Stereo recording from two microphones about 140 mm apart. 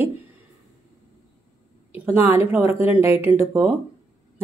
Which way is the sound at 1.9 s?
15° right (ahead or behind).